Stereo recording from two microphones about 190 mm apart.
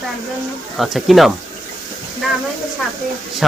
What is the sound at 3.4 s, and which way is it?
Speech, centre (ahead or behind).